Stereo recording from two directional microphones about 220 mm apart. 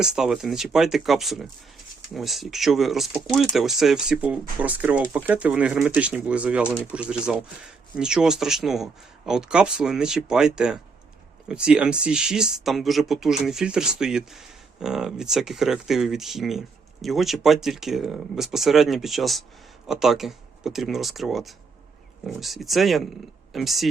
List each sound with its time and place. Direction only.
0.0 s speech: centre (ahead or behind)